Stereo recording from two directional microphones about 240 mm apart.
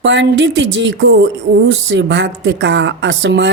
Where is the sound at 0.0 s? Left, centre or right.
Right.